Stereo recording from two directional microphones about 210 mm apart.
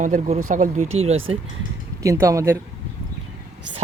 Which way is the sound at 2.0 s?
15° right (ahead or behind).